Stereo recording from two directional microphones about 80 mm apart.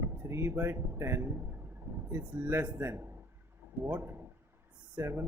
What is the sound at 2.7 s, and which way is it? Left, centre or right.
Speech, right.